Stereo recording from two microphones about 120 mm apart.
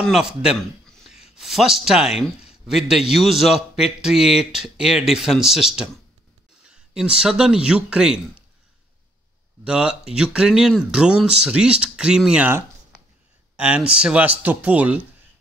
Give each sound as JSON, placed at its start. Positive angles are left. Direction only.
{"t": 0.0, "sound": "speech", "side_deg": -5}
{"t": 9.7, "sound": "speech", "side_deg": -5}
{"t": 13.6, "sound": "speech", "side_deg": -10}